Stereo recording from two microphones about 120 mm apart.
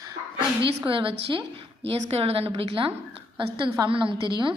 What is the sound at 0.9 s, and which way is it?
A woman's voice, 45° right (ahead or behind).